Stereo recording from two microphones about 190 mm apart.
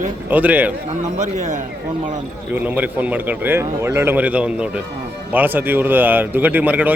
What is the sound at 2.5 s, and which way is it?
Speech, 10° right (ahead or behind).